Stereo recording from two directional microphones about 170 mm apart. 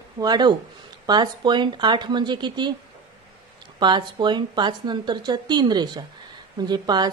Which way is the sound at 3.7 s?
25° right (ahead or behind).